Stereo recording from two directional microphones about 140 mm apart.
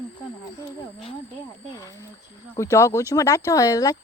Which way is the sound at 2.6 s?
20° left (ahead or behind).